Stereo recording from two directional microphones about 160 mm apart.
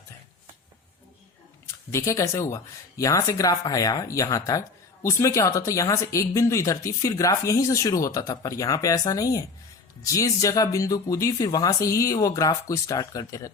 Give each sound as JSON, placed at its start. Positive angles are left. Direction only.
{"t": 1.9, "sound": "speech", "side_deg": 15}